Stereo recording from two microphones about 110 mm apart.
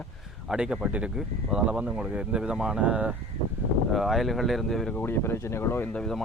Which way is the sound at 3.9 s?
Centre (ahead or behind).